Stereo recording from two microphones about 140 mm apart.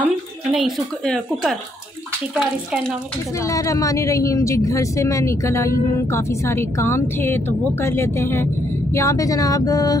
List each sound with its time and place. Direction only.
0.5 s speech: centre (ahead or behind)
3.3 s speech: 25° left (ahead or behind)